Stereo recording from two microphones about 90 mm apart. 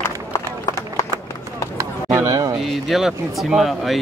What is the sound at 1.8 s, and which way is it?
Chop, 35° right (ahead or behind).